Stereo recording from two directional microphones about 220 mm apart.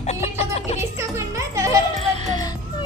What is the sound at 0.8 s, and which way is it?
Music, 10° right (ahead or behind).